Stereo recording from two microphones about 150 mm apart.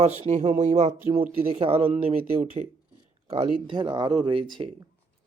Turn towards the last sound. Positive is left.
turn(degrees=-35)  # may be behind; listen again after turning